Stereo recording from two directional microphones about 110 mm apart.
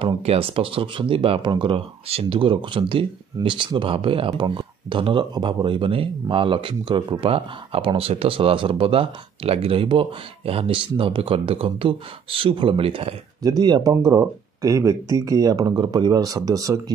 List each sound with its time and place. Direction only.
0.0 s speech: 60° right (ahead or behind)
13.4 s speech: 40° right (ahead or behind)